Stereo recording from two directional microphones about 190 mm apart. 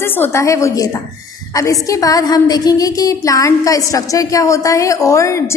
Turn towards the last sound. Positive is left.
turn(degrees=15)  # may be behind; listen again after turning